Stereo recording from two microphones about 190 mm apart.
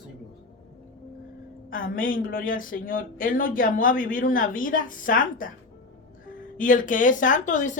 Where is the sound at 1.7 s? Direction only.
45° left (ahead or behind).